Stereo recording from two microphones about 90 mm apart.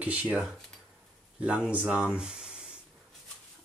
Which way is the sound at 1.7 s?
15° right (ahead or behind).